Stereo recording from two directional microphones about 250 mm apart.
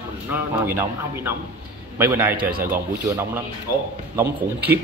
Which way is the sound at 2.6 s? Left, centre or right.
Centre.